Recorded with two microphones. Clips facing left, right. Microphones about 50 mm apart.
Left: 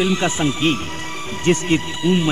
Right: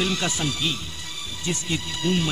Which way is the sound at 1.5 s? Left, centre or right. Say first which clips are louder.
Left 12 dB; left.